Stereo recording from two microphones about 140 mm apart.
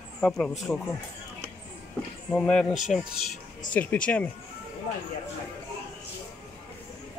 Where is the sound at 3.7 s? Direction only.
10° left (ahead or behind).